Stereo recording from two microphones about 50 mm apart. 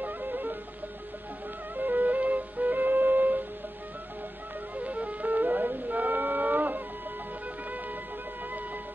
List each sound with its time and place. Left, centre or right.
0.0 s music: right
1.8 s music: right
4.7 s music: right